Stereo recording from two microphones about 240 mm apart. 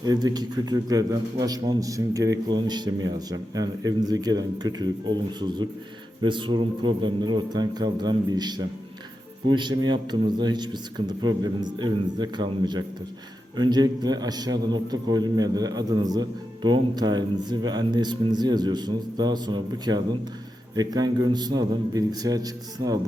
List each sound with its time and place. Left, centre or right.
0.0 s a man's voice: centre